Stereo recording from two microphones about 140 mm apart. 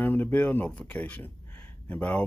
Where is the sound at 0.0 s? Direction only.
15° left (ahead or behind).